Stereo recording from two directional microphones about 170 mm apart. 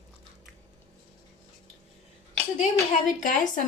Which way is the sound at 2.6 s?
45° left (ahead or behind).